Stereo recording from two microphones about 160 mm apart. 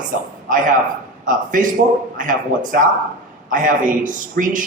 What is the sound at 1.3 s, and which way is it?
A man's voice, 55° right (ahead or behind).